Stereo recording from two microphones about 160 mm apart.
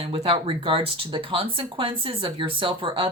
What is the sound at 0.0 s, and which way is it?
Speech, 35° right (ahead or behind).